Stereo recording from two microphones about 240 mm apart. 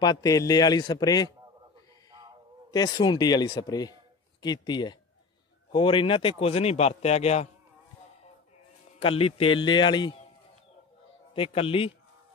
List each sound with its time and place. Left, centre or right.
0.0 s a man's voice: centre
2.7 s a man's voice: centre
9.0 s a man's voice: left
11.3 s a man's voice: left